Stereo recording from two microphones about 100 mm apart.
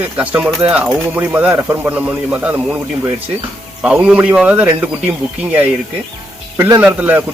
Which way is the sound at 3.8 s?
10° right (ahead or behind).